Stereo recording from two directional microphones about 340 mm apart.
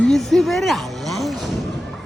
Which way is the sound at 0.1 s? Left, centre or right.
Centre.